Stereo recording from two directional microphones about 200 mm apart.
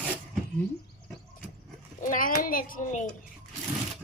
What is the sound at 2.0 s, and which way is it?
A child's voice, 45° left (ahead or behind).